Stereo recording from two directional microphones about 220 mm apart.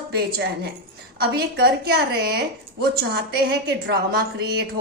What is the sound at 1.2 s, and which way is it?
A woman's voice, 45° right (ahead or behind).